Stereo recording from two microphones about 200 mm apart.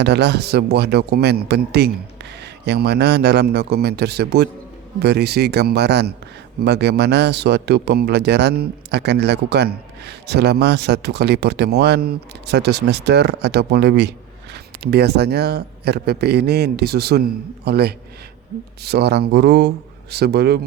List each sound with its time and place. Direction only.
0.0 s speech: 55° right (ahead or behind)